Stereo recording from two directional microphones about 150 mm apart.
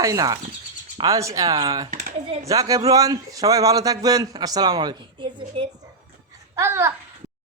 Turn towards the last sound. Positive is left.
turn(degrees=-15)  # may be behind; listen again after turning